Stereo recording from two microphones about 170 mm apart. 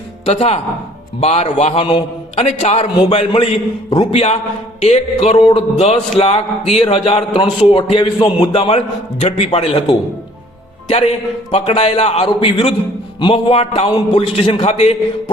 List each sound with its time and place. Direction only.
0.3 s a man's voice: 40° left (ahead or behind)
11.5 s a man's voice: 35° left (ahead or behind)